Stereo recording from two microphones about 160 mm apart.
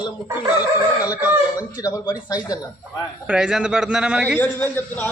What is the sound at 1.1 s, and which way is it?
Speech, 10° right (ahead or behind).